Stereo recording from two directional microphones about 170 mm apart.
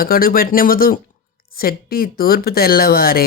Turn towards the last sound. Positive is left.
turn(degrees=60)  # may be behind; listen again after turning